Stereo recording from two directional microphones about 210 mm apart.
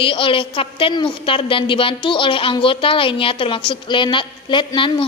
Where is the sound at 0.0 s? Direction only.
25° left (ahead or behind).